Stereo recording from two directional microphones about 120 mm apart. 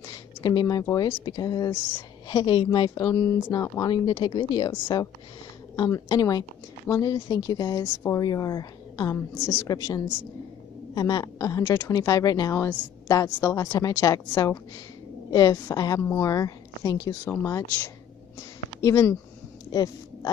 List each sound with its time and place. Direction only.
0.4 s speech: 35° left (ahead or behind)
3.8 s speech: 35° left (ahead or behind)
7.8 s speech: 15° left (ahead or behind)
8.1 s speech: 30° left (ahead or behind)
9.4 s speech: 20° left (ahead or behind)
9.7 s speech: 30° left (ahead or behind)